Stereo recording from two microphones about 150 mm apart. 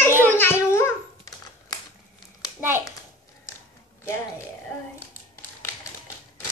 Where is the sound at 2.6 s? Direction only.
15° right (ahead or behind).